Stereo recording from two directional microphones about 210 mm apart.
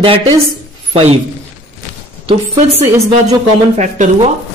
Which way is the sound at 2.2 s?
30° right (ahead or behind).